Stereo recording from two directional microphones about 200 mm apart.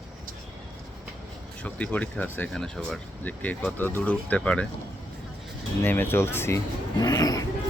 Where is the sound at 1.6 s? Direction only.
5° left (ahead or behind).